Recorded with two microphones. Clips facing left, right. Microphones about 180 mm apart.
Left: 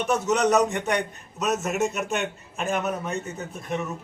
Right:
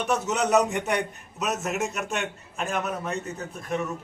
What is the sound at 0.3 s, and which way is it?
A man's voice, 5° right (ahead or behind).